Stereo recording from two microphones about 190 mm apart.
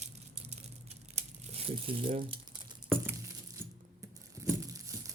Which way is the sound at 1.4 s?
30° right (ahead or behind).